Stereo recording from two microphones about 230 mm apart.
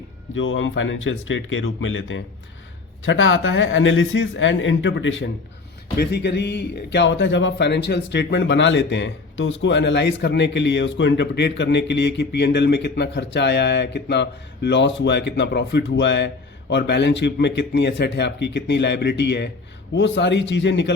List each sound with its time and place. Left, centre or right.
0.3 s speech: left